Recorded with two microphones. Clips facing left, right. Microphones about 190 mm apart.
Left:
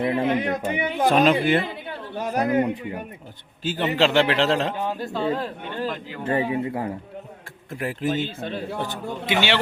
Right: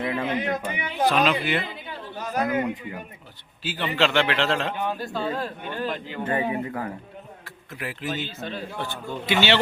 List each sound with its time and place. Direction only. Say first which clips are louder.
0.0 s speech: left 4 dB; 25° left (ahead or behind)
0.4 s a man's voice: left 3 dB; 35° left (ahead or behind)
0.9 s speech: left 3 dB; 50° left (ahead or behind)
2.5 s a man's voice: left 4 dB; 35° left (ahead or behind)
4.9 s speech: left 3 dB; 20° left (ahead or behind)
7.7 s speech: left 6 dB; 45° left (ahead or behind)
9.2 s speech: right 1 dB; 15° left (ahead or behind)